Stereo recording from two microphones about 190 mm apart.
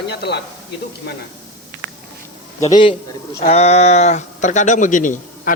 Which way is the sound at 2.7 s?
25° left (ahead or behind).